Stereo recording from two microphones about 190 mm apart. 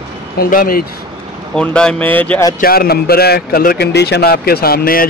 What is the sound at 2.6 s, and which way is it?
A man's voice, 55° left (ahead or behind).